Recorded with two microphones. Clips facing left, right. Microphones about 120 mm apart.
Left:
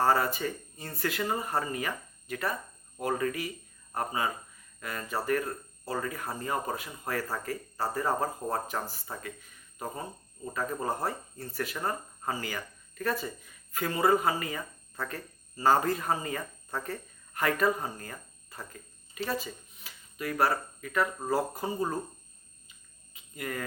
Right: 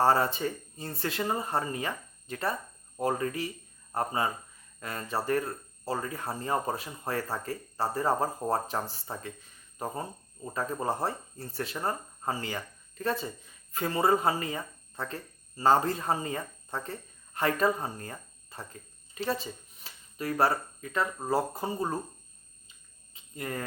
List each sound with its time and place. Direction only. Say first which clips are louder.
0.0 s speech: right 1 dB; 30° right (ahead or behind)
23.1 s cricket: right 1 dB; 30° right (ahead or behind)